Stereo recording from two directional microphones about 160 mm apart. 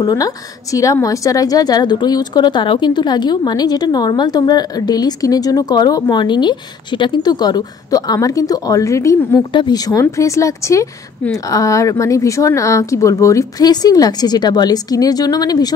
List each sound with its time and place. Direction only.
0.0 s a woman's voice: 25° left (ahead or behind)